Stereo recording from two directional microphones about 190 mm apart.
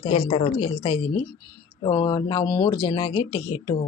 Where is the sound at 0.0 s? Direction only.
30° left (ahead or behind).